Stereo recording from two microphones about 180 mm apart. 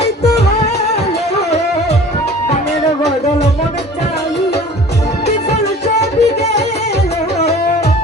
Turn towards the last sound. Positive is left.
turn(degrees=35)  # may be behind; listen again after turning